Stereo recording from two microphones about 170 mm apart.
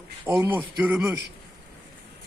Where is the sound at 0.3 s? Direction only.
10° right (ahead or behind).